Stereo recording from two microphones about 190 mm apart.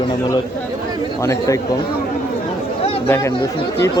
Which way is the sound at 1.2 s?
15° left (ahead or behind).